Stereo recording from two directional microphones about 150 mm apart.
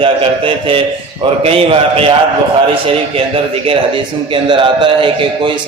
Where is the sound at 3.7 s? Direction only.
35° right (ahead or behind).